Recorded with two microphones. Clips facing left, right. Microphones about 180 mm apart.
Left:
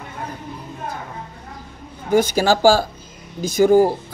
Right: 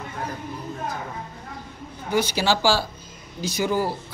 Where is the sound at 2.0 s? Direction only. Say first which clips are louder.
Left 6 dB; 50° left (ahead or behind).